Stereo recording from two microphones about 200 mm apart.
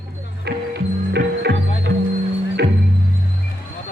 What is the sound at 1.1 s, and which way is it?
Music, 55° right (ahead or behind).